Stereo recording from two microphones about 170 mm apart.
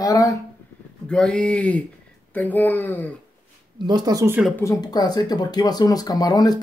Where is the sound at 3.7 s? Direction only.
25° right (ahead or behind).